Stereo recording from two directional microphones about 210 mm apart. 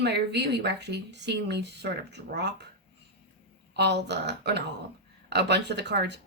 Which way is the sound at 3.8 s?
55° right (ahead or behind).